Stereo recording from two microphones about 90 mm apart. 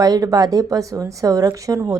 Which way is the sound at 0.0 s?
45° right (ahead or behind).